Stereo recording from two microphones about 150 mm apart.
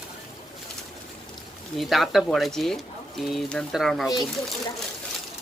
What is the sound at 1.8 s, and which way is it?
Speech, centre (ahead or behind).